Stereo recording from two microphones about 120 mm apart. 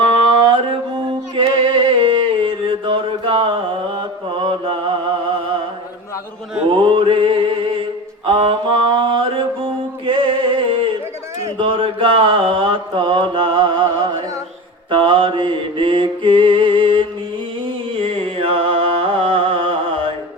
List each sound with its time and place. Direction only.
0.0 s music: 45° right (ahead or behind)
6.7 s mantra: 45° right (ahead or behind)
10.1 s music: 50° right (ahead or behind)
11.5 s mantra: 45° right (ahead or behind)
17.9 s music: 55° right (ahead or behind)